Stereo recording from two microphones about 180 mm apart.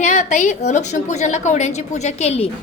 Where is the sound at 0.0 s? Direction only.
40° left (ahead or behind).